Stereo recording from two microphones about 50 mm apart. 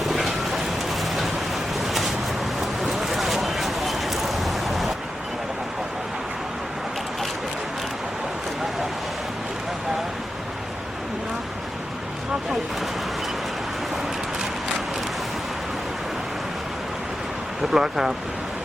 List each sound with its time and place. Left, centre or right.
0.0 s vehicle: centre
2.6 s a sound: centre
17.6 s speech: centre